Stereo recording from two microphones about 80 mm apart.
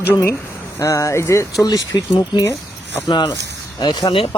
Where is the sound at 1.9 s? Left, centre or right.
Left.